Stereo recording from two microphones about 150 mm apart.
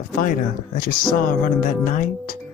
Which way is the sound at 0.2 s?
65° left (ahead or behind).